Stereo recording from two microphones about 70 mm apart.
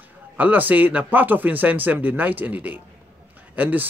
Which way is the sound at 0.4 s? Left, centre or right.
Right.